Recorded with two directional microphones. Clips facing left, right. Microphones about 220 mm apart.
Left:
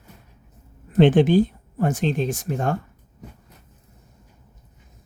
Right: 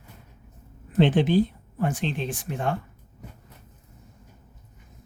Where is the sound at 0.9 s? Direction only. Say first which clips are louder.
Left 5 dB; 50° left (ahead or behind).